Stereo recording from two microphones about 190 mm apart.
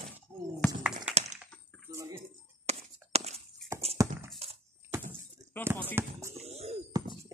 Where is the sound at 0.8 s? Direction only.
5° right (ahead or behind).